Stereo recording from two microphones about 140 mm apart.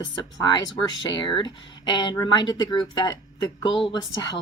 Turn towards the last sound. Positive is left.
turn(degrees=30)  # may be behind; listen again after turning